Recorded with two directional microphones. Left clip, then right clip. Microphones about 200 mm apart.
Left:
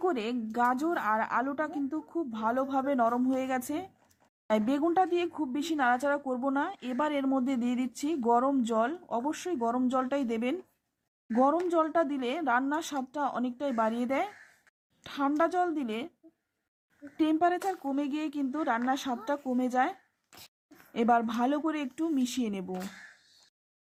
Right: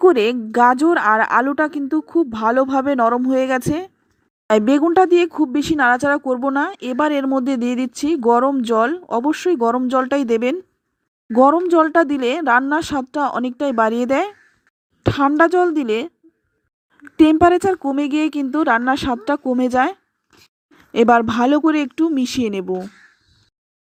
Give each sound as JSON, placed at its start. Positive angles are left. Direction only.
{"t": 0.0, "sound": "speech", "side_deg": -30}
{"t": 17.2, "sound": "speech", "side_deg": -30}